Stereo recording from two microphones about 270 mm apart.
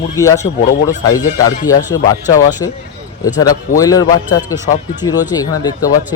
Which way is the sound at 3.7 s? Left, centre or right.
Centre.